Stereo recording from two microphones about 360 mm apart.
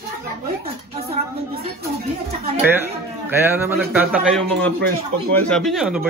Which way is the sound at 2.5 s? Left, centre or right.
Centre.